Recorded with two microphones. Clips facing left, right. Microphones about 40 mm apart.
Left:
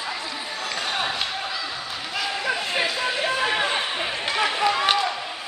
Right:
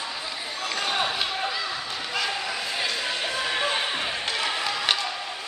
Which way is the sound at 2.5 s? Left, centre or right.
Left.